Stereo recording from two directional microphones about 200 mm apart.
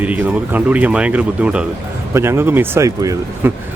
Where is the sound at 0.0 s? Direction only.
5° right (ahead or behind).